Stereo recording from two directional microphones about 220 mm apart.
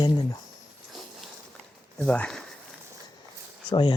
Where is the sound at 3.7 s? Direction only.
20° left (ahead or behind).